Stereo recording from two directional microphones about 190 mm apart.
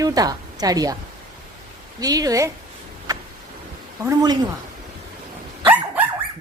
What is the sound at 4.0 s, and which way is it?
Speech, 20° right (ahead or behind).